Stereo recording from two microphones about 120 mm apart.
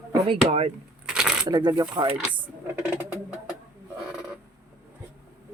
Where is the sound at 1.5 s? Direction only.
35° right (ahead or behind).